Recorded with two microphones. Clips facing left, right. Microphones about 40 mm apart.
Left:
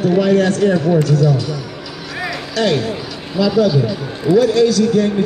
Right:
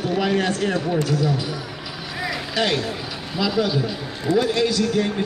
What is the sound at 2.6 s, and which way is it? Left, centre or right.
Speech, centre.